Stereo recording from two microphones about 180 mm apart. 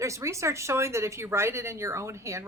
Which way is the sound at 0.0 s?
15° right (ahead or behind).